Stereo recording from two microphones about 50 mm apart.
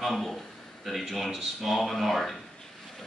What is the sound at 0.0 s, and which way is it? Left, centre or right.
A man's voice, centre.